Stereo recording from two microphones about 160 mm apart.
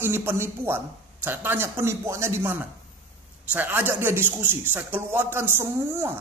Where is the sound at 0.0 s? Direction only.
15° right (ahead or behind).